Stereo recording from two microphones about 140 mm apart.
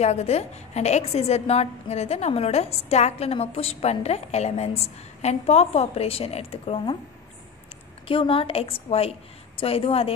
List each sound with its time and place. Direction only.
0.0 s a woman's voice: 50° left (ahead or behind)
8.1 s a woman's voice: 40° left (ahead or behind)